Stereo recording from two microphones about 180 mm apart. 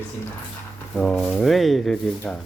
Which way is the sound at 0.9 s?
5° left (ahead or behind).